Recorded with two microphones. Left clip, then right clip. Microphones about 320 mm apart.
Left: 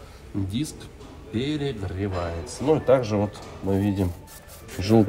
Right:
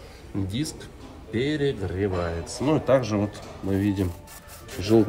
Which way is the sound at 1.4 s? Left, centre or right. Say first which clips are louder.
Right 3 dB; right.